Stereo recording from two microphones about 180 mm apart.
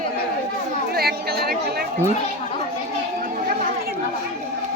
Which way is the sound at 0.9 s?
60° right (ahead or behind).